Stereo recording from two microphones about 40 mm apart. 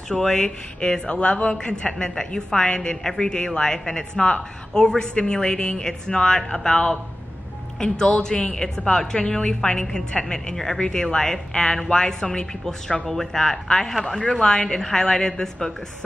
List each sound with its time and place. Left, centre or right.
0.1 s speech: centre
14.4 s speech: left